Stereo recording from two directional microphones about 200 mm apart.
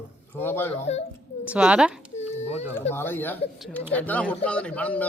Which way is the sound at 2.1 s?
35° left (ahead or behind).